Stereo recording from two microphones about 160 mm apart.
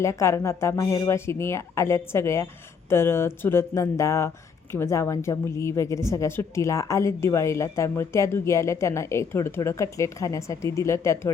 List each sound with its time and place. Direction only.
0.0 s a woman's voice: 20° left (ahead or behind)